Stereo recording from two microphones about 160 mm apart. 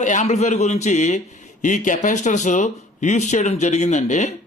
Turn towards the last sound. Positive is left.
turn(degrees=45)  # may be behind; listen again after turning